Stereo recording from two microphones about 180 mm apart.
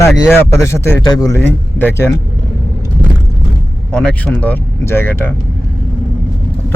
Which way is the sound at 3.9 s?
5° left (ahead or behind).